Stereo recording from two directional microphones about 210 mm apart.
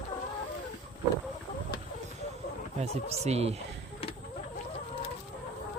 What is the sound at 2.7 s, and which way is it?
Speech, 30° right (ahead or behind).